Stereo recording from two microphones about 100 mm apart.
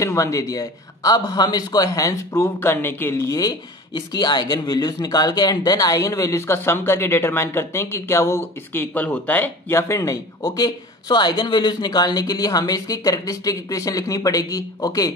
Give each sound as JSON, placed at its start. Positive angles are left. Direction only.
{"t": 0.0, "sound": "speech", "side_deg": 30}
{"t": 3.9, "sound": "speech", "side_deg": 50}
{"t": 9.8, "sound": "speech", "side_deg": 30}